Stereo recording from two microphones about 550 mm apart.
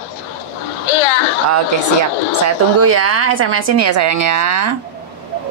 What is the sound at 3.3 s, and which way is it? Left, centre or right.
Speech, right.